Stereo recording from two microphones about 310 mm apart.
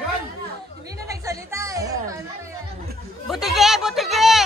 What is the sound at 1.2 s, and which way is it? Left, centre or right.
Music, centre.